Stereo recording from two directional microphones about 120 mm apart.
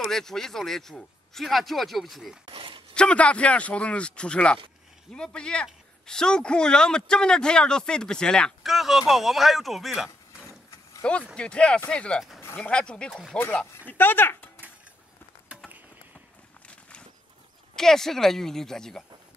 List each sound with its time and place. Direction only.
0.0 s speech: 5° left (ahead or behind)
2.4 s a sound: 45° right (ahead or behind)
2.9 s a man's voice: 10° left (ahead or behind)
11.0 s a man's voice: 5° left (ahead or behind)
17.7 s speech: 5° left (ahead or behind)